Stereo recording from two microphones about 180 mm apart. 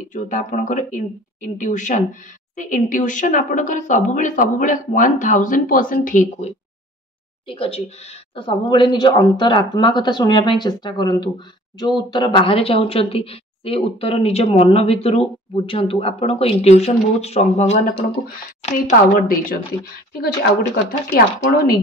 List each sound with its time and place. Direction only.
0.1 s a woman's voice: 45° left (ahead or behind)
7.4 s speech: 30° left (ahead or behind)
18.6 s a woman's voice: 50° left (ahead or behind)
21.1 s speech: 55° left (ahead or behind)